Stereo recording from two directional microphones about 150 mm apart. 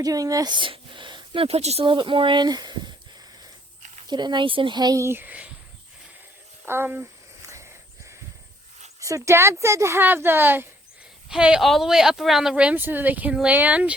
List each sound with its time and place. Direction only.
0.0 s speech: 25° right (ahead or behind)
4.1 s speech: 30° right (ahead or behind); by 5.5 s 10° right (ahead or behind)
6.7 s speech: 15° right (ahead or behind)
7.4 s a sound: 20° right (ahead or behind)
9.0 s speech: 20° right (ahead or behind)